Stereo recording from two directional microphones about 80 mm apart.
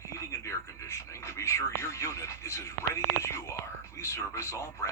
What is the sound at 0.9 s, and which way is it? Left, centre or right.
Speech, left.